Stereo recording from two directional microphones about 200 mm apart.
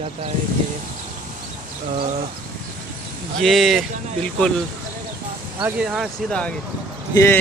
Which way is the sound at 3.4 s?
Centre (ahead or behind).